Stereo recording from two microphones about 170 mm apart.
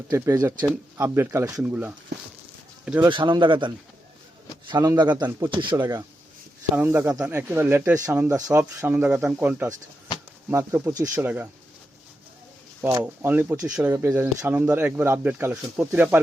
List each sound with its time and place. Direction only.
0.9 s speech: 15° right (ahead or behind)
3.1 s a man's voice: 30° right (ahead or behind); by 11.4 s 10° right (ahead or behind)
12.8 s speech: 10° right (ahead or behind)